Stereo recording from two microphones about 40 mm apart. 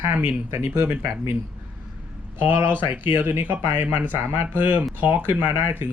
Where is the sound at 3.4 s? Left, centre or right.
Right.